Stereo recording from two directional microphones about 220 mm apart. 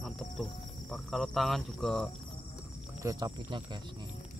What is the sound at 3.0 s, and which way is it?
Speech, 20° right (ahead or behind).